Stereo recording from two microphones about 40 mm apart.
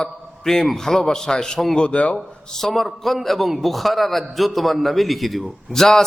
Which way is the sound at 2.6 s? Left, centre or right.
Centre.